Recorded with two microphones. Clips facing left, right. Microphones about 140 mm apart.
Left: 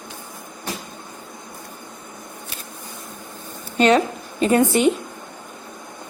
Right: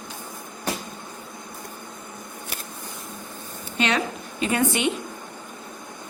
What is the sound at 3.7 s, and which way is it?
A woman's voice, 40° left (ahead or behind).